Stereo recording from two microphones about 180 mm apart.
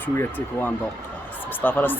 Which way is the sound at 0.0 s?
10° left (ahead or behind).